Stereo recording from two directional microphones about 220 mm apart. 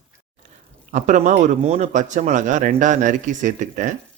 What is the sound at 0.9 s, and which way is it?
Speech, 35° right (ahead or behind).